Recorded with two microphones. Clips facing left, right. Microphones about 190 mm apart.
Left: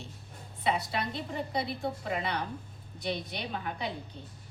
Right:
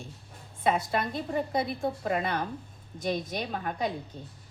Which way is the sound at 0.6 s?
50° right (ahead or behind).